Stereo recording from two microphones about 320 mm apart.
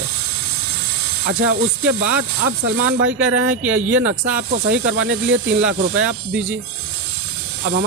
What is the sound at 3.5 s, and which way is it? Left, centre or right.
Speech, centre.